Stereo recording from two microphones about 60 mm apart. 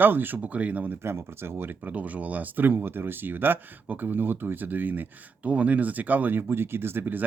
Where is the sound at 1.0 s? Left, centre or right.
Right.